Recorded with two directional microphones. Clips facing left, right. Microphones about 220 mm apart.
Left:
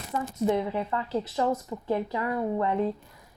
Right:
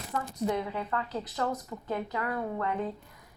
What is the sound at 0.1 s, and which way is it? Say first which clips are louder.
Speech: left 5 dB; 25° left (ahead or behind).